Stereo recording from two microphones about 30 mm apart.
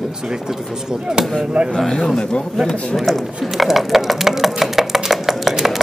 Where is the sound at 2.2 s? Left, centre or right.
Left.